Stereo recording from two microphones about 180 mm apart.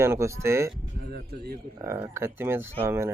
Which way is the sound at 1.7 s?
15° right (ahead or behind).